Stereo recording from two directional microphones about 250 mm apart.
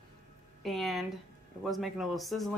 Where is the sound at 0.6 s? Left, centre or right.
Centre.